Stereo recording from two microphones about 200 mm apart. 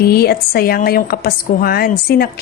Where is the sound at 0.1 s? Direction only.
50° left (ahead or behind).